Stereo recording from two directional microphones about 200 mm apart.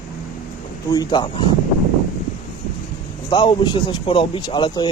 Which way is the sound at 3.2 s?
25° left (ahead or behind).